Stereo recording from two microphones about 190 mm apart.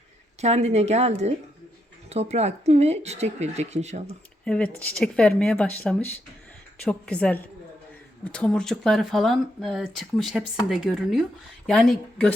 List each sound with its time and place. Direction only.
0.4 s speech: 35° right (ahead or behind)
4.4 s a woman's voice: 5° left (ahead or behind)